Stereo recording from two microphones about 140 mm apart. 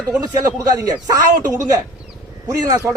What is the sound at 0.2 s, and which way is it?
Speech, 25° right (ahead or behind).